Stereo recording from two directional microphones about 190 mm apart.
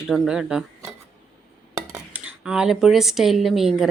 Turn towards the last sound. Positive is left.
turn(degrees=0)  # may be behind; listen again after turning